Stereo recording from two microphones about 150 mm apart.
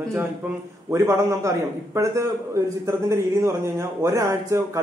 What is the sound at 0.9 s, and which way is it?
A man's voice, 20° right (ahead or behind).